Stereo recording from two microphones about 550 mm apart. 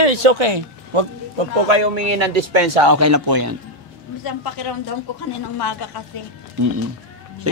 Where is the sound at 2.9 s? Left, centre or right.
Right.